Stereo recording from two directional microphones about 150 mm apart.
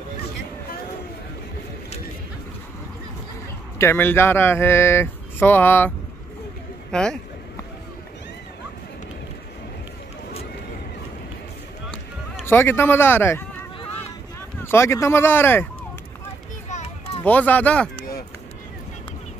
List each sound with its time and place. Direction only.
3.7 s speech: 15° left (ahead or behind)
12.4 s speech: 15° left (ahead or behind)
14.6 s speech: 15° left (ahead or behind)
16.6 s children playing: 50° left (ahead or behind)
17.2 s speech: 10° left (ahead or behind)